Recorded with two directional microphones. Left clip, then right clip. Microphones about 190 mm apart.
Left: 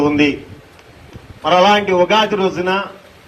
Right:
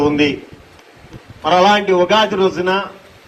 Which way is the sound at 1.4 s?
20° left (ahead or behind).